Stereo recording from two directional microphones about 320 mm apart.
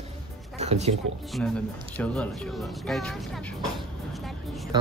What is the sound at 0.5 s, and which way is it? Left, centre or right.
Speech, right.